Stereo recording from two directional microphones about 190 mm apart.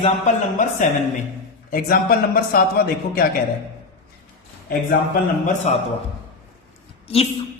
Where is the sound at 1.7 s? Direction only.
50° left (ahead or behind).